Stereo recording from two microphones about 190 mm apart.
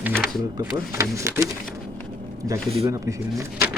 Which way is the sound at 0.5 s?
15° right (ahead or behind).